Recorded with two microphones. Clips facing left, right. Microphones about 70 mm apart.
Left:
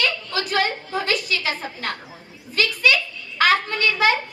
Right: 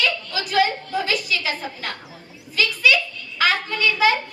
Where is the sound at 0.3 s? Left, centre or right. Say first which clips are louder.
Right 3 dB; left.